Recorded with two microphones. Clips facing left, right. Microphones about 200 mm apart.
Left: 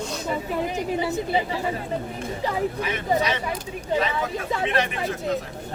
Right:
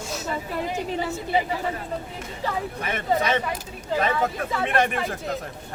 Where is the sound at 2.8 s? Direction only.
50° right (ahead or behind).